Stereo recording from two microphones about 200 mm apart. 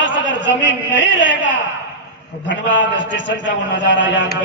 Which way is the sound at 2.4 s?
65° left (ahead or behind).